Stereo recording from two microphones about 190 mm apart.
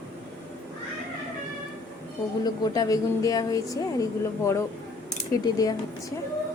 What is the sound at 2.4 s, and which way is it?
Speech, 20° left (ahead or behind).